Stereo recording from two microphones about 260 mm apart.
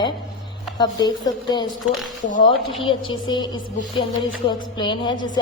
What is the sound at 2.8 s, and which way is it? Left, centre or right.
Music, centre.